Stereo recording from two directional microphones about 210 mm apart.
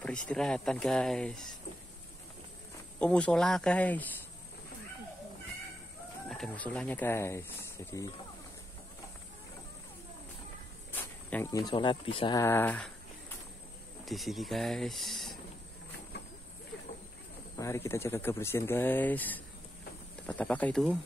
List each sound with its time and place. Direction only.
0.3 s speech: 5° left (ahead or behind)
3.0 s speech: 5° left (ahead or behind)
6.2 s speech: centre (ahead or behind)
11.2 s speech: 10° left (ahead or behind)
14.0 s speech: centre (ahead or behind)
17.6 s speech: 10° left (ahead or behind)